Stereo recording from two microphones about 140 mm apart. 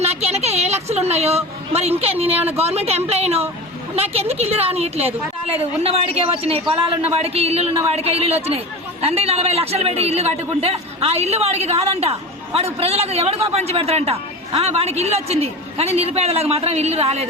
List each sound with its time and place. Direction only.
0.0 s speech: 50° right (ahead or behind)
2.2 s speech: 15° right (ahead or behind)
2.6 s speech: 45° right (ahead or behind)